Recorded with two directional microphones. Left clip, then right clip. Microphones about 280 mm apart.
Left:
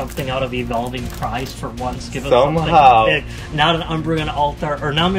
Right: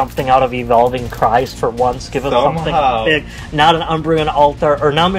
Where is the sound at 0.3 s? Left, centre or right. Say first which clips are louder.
Right 10 dB; centre.